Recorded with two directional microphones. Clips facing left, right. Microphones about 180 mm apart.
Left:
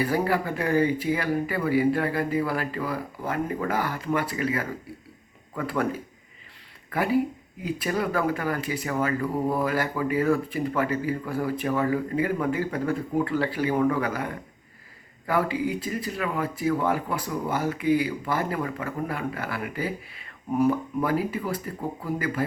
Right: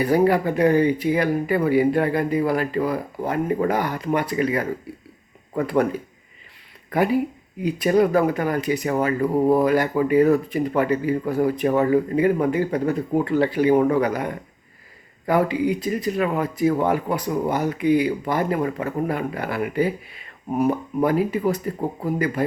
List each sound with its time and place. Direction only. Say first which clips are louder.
0.0 s speech: right 7 dB; 25° right (ahead or behind)
6.9 s speech: right 4 dB; 20° right (ahead or behind)
15.3 s speech: right 5 dB; 20° right (ahead or behind)